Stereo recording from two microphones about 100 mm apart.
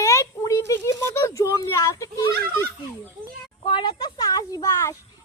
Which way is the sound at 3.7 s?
50° left (ahead or behind).